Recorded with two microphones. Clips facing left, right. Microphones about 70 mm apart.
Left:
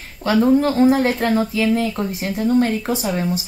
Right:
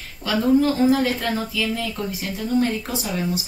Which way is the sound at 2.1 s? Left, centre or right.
Left.